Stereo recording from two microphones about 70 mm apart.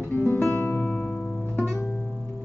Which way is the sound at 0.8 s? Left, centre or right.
Left.